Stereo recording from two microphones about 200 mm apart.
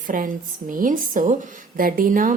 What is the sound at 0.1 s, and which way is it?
A woman's voice, 45° right (ahead or behind).